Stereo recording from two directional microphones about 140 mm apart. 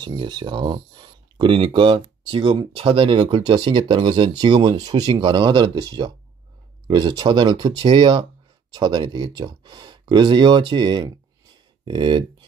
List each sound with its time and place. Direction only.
0.0 s speech: 30° right (ahead or behind)